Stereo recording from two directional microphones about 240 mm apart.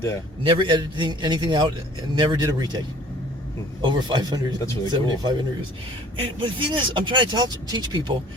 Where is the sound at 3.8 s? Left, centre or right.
Centre.